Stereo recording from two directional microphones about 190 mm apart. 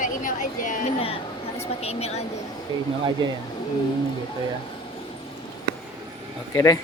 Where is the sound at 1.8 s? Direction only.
35° left (ahead or behind).